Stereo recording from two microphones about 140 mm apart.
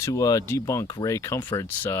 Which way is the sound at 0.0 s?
25° left (ahead or behind).